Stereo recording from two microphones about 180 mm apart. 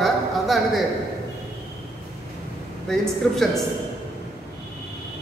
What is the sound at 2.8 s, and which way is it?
Speech, centre (ahead or behind).